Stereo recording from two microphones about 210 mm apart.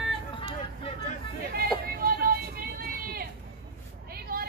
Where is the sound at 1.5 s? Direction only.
45° right (ahead or behind).